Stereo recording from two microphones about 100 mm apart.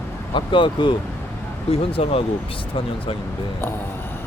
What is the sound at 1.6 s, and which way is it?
Speech, 75° left (ahead or behind).